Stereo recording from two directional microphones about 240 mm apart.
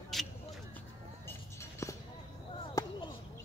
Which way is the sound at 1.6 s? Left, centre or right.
Centre.